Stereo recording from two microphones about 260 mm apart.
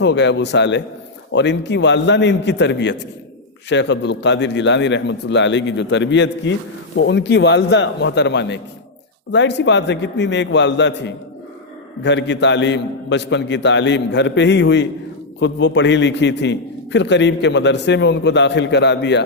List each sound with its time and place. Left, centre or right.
0.0 s a man's voice: left